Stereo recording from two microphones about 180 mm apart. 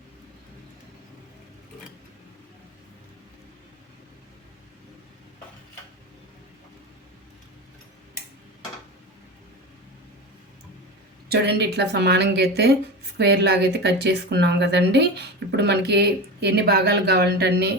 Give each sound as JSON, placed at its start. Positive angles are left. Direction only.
{"t": 11.3, "sound": "speech", "side_deg": -65}